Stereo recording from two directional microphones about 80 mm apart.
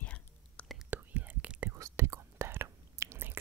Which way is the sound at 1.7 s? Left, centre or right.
Right.